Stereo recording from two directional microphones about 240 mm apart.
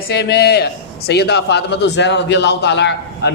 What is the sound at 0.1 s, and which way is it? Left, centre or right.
A man's voice, left.